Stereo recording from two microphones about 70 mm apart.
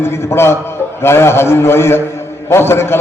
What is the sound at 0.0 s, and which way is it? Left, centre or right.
A man's voice, left.